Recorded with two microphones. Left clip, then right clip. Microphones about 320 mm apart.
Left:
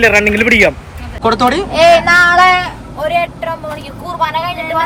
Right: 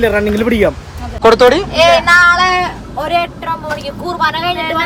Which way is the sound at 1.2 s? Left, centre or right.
Centre.